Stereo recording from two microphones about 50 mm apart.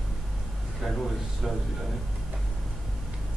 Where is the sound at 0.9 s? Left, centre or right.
Centre.